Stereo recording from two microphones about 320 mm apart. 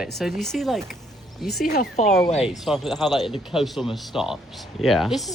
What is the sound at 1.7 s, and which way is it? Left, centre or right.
Speech, left.